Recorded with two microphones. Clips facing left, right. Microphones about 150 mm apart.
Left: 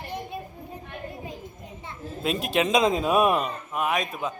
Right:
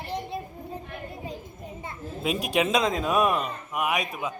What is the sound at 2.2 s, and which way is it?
Speech, 10° right (ahead or behind).